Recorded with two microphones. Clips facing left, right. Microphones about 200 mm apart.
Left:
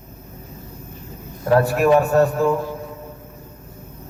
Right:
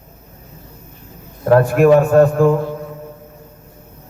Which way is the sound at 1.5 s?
50° right (ahead or behind).